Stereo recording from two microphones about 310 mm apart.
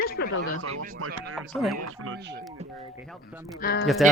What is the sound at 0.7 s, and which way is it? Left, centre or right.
Speech, right.